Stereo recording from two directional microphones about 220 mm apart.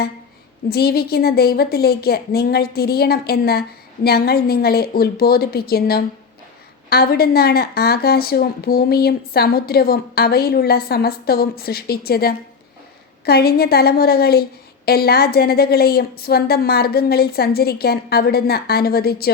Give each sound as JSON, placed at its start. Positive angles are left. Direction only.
{"t": 0.7, "sound": "a woman's voice", "side_deg": 45}